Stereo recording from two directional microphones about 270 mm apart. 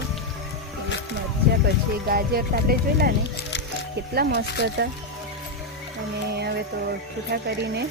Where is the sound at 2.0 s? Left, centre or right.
Right.